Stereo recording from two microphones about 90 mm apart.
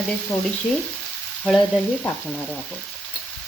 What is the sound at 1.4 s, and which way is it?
Stir, centre (ahead or behind).